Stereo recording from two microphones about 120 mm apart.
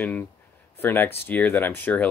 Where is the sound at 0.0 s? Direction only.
15° left (ahead or behind).